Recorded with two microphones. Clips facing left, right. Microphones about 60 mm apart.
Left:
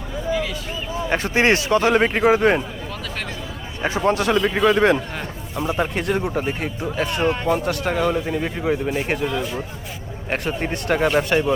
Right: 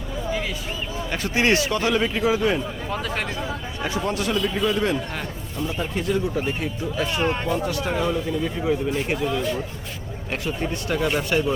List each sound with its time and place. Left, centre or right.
1.1 s a man's voice: left
4.0 s speech: left
8.6 s a man's voice: left
9.3 s speech: centre
10.2 s speech: left